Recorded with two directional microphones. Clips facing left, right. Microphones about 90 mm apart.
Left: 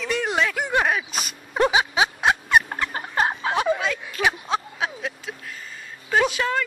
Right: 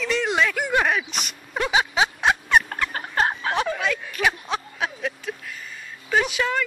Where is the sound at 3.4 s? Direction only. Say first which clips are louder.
Left 2 dB; 20° left (ahead or behind).